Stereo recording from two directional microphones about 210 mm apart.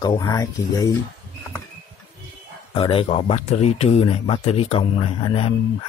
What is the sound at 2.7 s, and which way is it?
Speech, 25° left (ahead or behind).